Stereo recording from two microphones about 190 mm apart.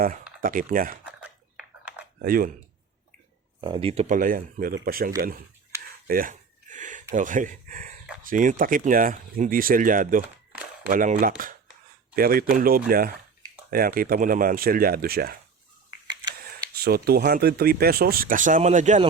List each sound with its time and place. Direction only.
0.4 s speech: 45° right (ahead or behind)
1.0 s a sound: 5° right (ahead or behind)
2.2 s speech: 50° right (ahead or behind)
3.6 s speech: 25° right (ahead or behind); by 5.1 s 50° right (ahead or behind)
6.1 s a sound: 45° right (ahead or behind)
7.1 s speech: 40° right (ahead or behind)
15.9 s camera: 20° right (ahead or behind)
16.7 s speech: 55° right (ahead or behind); by 19.0 s 40° right (ahead or behind)